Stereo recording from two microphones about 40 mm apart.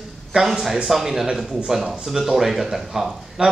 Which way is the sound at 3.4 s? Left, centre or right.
Right.